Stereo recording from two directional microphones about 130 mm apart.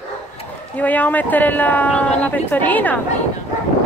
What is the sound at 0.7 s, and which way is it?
Speech, 10° left (ahead or behind).